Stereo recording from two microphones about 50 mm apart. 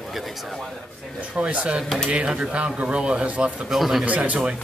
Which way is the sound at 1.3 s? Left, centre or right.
Right.